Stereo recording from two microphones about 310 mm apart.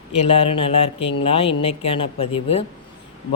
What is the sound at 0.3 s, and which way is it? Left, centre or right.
A woman's voice, centre.